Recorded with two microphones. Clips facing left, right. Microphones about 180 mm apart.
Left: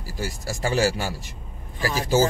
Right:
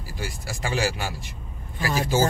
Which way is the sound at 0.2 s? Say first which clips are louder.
Left 4 dB; 40° left (ahead or behind).